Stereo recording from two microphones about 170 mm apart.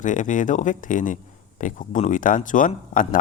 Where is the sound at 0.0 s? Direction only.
50° left (ahead or behind).